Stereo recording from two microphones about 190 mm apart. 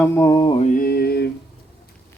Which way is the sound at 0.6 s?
50° left (ahead or behind).